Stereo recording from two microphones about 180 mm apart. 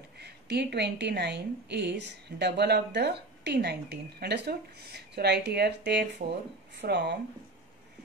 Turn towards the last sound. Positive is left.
turn(degrees=-70)  # may be behind; listen again after turning